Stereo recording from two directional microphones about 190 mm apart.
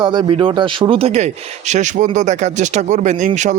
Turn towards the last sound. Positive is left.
turn(degrees=-40)  # may be behind; listen again after turning